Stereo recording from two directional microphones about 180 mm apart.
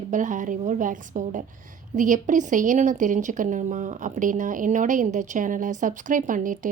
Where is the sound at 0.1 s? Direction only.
45° right (ahead or behind).